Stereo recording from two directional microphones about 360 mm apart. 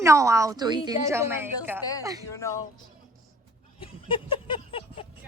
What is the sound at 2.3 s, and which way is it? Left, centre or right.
Speech, centre.